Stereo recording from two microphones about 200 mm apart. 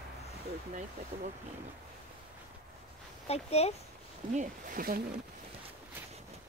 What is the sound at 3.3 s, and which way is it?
Speech, 30° left (ahead or behind).